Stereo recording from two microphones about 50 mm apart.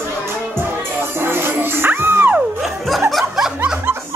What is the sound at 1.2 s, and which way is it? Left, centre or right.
Music, right.